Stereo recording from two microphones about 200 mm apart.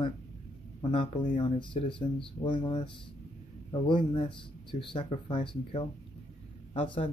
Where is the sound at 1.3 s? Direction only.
25° left (ahead or behind).